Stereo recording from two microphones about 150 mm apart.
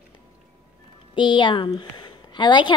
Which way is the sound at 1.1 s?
30° left (ahead or behind).